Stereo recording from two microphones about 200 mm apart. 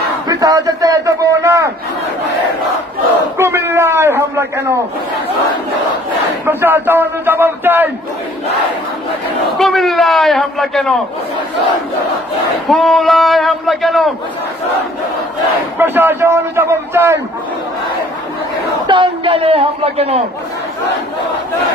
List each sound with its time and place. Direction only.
0.3 s a man's voice: 15° right (ahead or behind)
3.3 s a man's voice: 10° right (ahead or behind)
6.4 s a man's voice: 10° right (ahead or behind)
9.6 s a man's voice: centre (ahead or behind)
12.6 s a man's voice: centre (ahead or behind)
15.8 s a man's voice: 10° right (ahead or behind)
18.9 s a man's voice: 25° right (ahead or behind)